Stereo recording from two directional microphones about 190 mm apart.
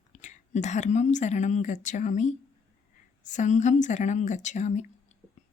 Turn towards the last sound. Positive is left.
turn(degrees=40)  # may be behind; listen again after turning